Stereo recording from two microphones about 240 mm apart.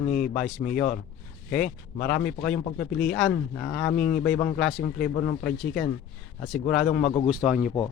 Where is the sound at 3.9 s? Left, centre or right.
Left.